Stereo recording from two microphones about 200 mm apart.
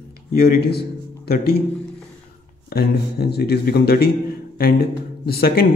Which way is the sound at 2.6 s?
50° left (ahead or behind).